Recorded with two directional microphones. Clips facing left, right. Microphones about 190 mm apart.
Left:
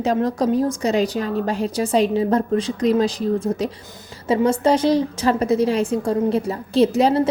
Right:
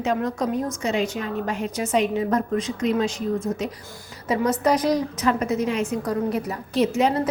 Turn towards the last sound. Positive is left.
turn(degrees=30)  # may be behind; listen again after turning